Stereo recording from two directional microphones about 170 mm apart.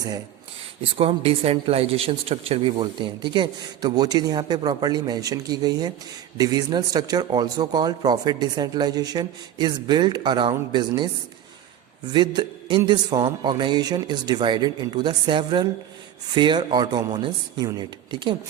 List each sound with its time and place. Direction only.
0.9 s speech: 35° right (ahead or behind)